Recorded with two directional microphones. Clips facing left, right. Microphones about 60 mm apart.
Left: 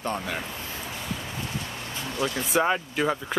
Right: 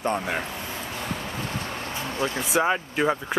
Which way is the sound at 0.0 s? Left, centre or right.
Right.